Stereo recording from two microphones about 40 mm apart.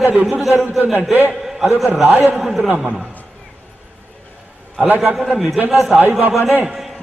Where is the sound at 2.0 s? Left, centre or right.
Right.